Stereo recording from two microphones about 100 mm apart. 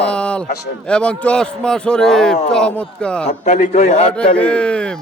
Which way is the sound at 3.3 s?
90° left.